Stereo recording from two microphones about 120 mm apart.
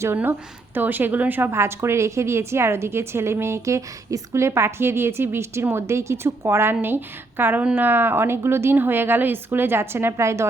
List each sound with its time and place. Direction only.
0.0 s a woman's voice: 20° right (ahead or behind)